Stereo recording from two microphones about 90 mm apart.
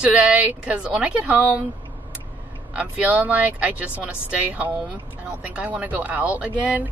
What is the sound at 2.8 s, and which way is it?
Speech, 15° right (ahead or behind).